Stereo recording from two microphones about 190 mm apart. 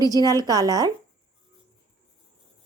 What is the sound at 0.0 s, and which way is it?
Speech, 20° right (ahead or behind).